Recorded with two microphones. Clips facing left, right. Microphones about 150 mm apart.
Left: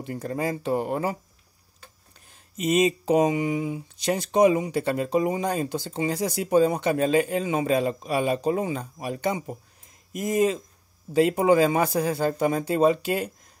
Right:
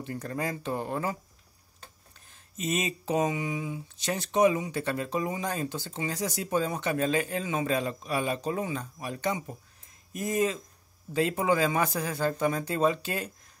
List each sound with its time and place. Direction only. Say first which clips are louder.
0.4 s speech: left 7 dB; 10° left (ahead or behind)
2.6 s speech: left 9 dB; 15° left (ahead or behind)
11.3 s speech: left 5 dB; 35° left (ahead or behind)
12.5 s speech: left 6 dB; 10° left (ahead or behind)